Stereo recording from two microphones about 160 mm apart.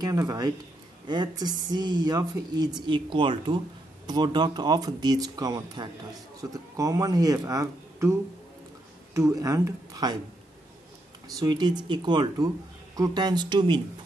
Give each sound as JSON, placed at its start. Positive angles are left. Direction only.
{"t": 0.0, "sound": "speech", "side_deg": -20}
{"t": 11.2, "sound": "speech", "side_deg": -25}